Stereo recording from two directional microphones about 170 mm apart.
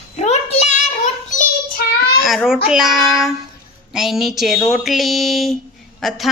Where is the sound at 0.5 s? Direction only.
40° left (ahead or behind).